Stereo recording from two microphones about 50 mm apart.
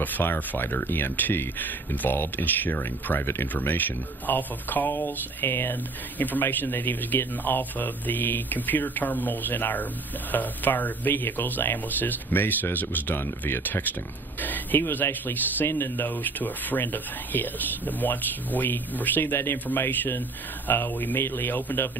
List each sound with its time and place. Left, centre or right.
0.0 s speech: left
4.9 s a sound: left
6.1 s speech: left
14.4 s speech: left